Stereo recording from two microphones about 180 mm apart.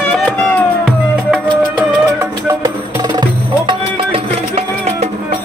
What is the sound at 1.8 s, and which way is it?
Music, 15° right (ahead or behind).